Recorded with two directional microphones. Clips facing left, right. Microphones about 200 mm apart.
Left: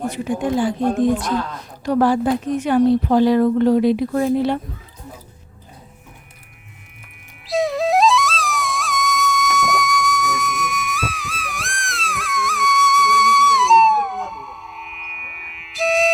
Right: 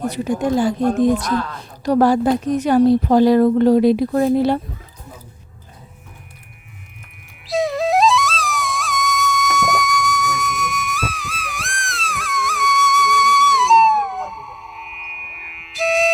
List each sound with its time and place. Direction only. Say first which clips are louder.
0.1 s a woman's voice: right 2 dB; 40° right (ahead or behind)
7.4 s flute: even; centre (ahead or behind)